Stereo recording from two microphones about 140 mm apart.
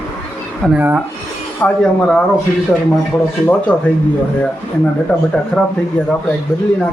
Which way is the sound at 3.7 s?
10° left (ahead or behind).